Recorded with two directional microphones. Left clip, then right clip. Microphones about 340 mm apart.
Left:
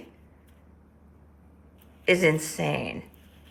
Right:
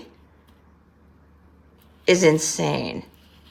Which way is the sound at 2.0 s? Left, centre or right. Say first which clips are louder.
Right 5 dB; centre.